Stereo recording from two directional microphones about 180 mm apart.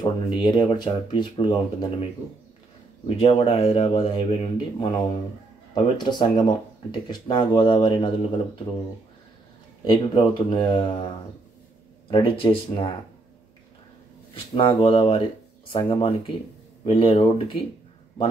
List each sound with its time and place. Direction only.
0.0 s speech: 25° left (ahead or behind)
3.2 s speech: 35° left (ahead or behind)
9.8 s speech: 25° left (ahead or behind)
12.1 s speech: 30° left (ahead or behind)
14.5 s speech: 30° left (ahead or behind)